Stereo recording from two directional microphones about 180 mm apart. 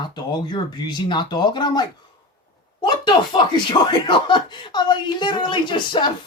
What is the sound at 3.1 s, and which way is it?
Speech, 25° left (ahead or behind).